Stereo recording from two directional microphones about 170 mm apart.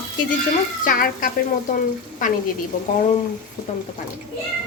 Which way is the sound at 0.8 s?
50° left (ahead or behind).